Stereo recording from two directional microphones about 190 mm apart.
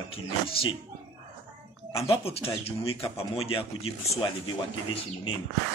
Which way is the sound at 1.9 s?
30° left (ahead or behind).